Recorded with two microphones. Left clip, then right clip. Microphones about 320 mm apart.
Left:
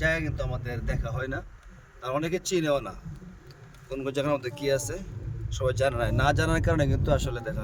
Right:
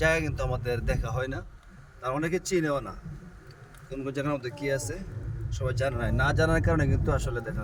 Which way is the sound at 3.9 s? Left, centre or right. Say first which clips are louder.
Left 3 dB; centre.